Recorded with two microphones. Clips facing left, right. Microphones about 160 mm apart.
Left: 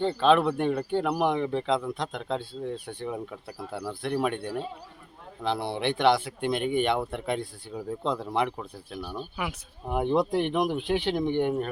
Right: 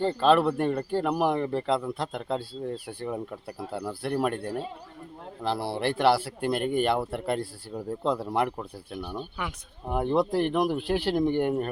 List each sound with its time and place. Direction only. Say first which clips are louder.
0.2 s speech: even; centre (ahead or behind)
5.4 s speech: even; 5° right (ahead or behind)
9.0 s speech: right 1 dB; 20° right (ahead or behind)
9.4 s speech: left 1 dB; 5° left (ahead or behind)